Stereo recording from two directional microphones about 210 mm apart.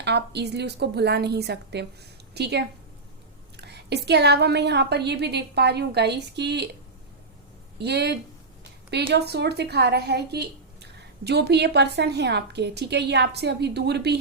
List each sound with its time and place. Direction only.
0.0 s a woman's voice: 55° right (ahead or behind)
7.8 s a woman's voice: 50° right (ahead or behind)